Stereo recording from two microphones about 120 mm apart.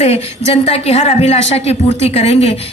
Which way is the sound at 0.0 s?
60° left (ahead or behind).